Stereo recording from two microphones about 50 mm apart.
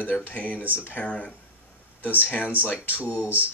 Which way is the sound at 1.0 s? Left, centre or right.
Left.